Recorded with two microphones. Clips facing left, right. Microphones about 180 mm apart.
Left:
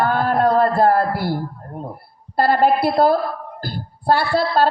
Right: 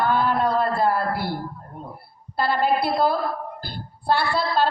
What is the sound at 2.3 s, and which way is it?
Speech, 45° left (ahead or behind).